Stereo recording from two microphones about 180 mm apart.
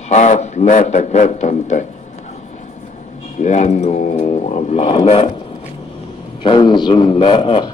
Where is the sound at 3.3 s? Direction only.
40° left (ahead or behind).